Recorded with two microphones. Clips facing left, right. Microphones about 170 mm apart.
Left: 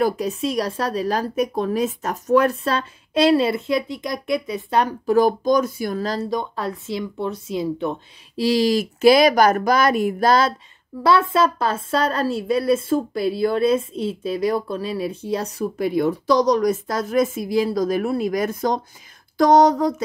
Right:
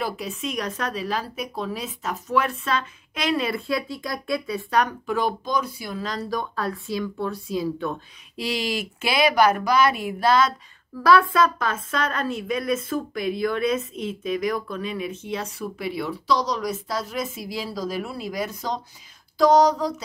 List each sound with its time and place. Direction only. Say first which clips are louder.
0.0 s a woman's voice: left 8 dB; 35° left (ahead or behind)
6.3 s speech: left 2 dB; 20° left (ahead or behind)
8.4 s a woman's voice: left 9 dB; 35° left (ahead or behind)
11.0 s a woman's voice: left 1 dB; 25° left (ahead or behind); by 18.8 s 50° left (ahead or behind)
19.3 s a sound: left 3 dB; 55° left (ahead or behind)